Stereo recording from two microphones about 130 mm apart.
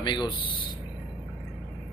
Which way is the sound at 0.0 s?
40° left (ahead or behind).